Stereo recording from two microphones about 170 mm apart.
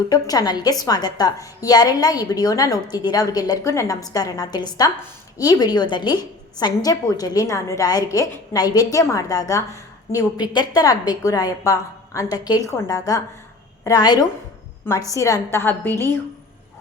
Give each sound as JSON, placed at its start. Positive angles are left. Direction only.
{"t": 0.1, "sound": "a woman's voice", "side_deg": 20}